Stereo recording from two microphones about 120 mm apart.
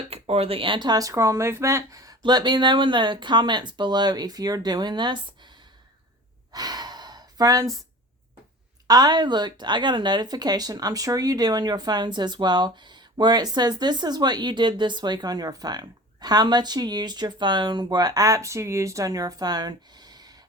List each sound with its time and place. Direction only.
0.1 s a woman's voice: 55° right (ahead or behind); by 5.5 s 40° right (ahead or behind)
6.5 s sigh: 35° right (ahead or behind)
8.9 s a woman's voice: 35° right (ahead or behind)